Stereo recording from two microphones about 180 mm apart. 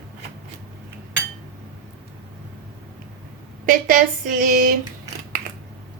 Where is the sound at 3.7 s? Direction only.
55° right (ahead or behind).